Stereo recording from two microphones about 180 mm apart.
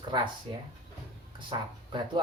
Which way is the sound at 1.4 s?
25° right (ahead or behind).